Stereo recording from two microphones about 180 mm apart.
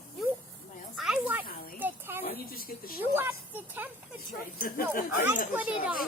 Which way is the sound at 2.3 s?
55° left (ahead or behind).